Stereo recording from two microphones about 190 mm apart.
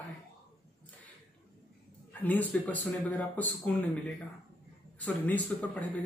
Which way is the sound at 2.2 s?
10° left (ahead or behind).